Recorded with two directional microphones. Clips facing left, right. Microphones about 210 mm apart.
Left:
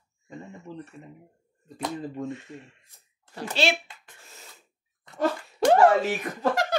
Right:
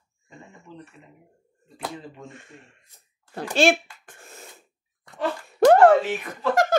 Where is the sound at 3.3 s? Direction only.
50° right (ahead or behind).